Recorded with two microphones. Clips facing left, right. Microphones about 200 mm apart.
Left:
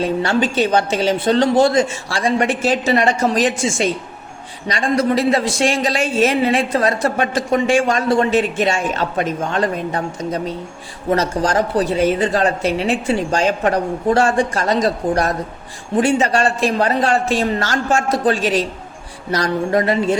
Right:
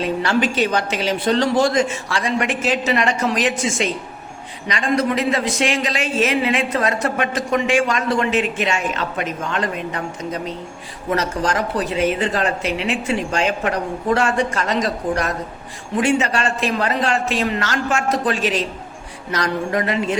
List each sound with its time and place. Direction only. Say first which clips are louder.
0.0 s a woman's voice: left 2 dB; 30° left (ahead or behind)